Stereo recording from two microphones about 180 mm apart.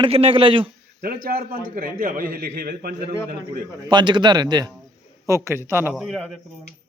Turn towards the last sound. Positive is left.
turn(degrees=5)  # may be behind; listen again after turning